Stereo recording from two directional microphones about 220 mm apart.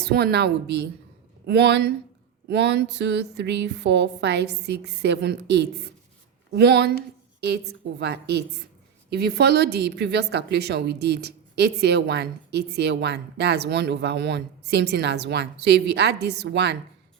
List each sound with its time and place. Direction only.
0.0 s a woman's voice: 45° right (ahead or behind)